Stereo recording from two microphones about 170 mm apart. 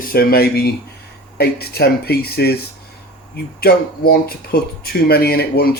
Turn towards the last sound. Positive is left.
turn(degrees=65)  # may be behind; listen again after turning